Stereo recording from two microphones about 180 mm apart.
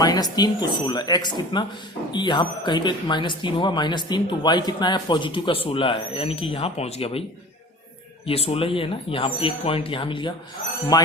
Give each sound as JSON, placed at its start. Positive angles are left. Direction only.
{"t": 0.0, "sound": "speech", "side_deg": 20}
{"t": 8.3, "sound": "speech", "side_deg": 30}